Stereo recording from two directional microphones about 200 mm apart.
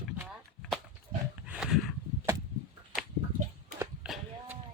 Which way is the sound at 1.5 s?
Centre (ahead or behind).